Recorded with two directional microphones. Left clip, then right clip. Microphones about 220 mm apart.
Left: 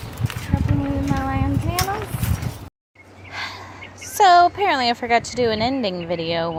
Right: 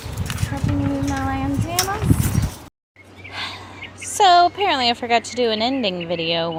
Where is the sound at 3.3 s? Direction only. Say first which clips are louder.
Even; centre (ahead or behind).